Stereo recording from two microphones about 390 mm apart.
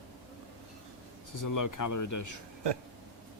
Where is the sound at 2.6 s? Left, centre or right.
Right.